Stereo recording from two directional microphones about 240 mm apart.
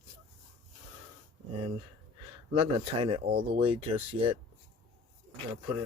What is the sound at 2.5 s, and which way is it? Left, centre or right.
Speech, right.